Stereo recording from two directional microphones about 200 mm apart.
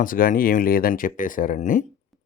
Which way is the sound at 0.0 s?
45° left (ahead or behind).